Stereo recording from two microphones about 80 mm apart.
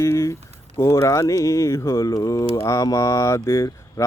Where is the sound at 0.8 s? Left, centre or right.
Left.